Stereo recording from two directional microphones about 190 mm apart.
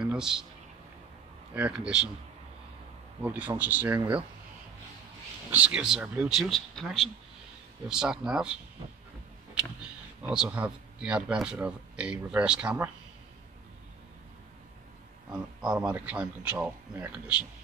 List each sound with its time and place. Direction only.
0.0 s a sound: 5° right (ahead or behind)
1.5 s speech: 5° right (ahead or behind)
3.2 s speech: 10° right (ahead or behind)
5.5 s speech: 5° right (ahead or behind)
10.2 s speech: 5° right (ahead or behind)
15.3 s speech: 5° right (ahead or behind)